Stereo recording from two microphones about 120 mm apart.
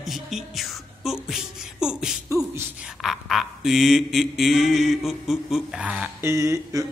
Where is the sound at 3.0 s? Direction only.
Centre (ahead or behind).